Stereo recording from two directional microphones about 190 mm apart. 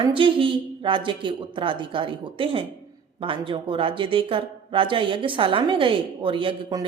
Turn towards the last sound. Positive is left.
turn(degrees=-25)  # may be behind; listen again after turning